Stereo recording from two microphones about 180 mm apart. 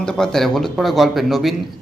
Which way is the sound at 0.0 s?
5° left (ahead or behind).